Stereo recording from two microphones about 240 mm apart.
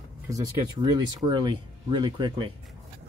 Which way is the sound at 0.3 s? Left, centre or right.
Centre.